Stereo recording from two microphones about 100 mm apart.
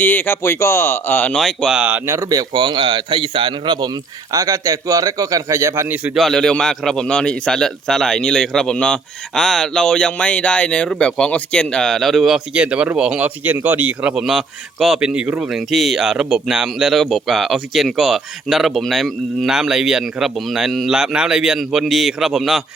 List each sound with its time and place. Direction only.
0.0 s speech: 20° left (ahead or behind)
1.3 s a man's voice: centre (ahead or behind)
2.0 s speech: 30° right (ahead or behind)
6.1 s a man's voice: 5° left (ahead or behind)